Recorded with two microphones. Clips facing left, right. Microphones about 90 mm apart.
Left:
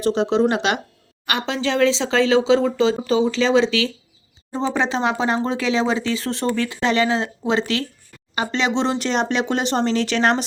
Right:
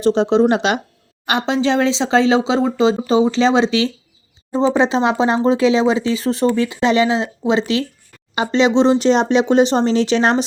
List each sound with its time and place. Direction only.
0.0 s speech: 25° right (ahead or behind)